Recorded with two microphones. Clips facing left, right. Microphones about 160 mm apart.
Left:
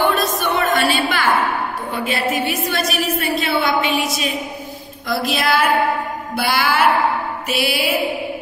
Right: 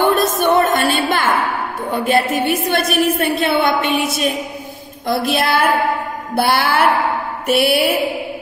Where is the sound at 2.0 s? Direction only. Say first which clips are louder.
Right 5 dB; 55° right (ahead or behind).